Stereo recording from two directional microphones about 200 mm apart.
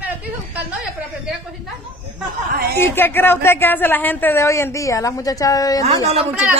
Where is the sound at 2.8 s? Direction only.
10° left (ahead or behind).